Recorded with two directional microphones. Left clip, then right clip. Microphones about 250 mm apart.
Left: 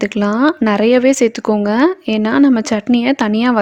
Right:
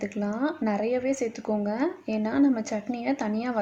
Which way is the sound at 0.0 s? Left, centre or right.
Left.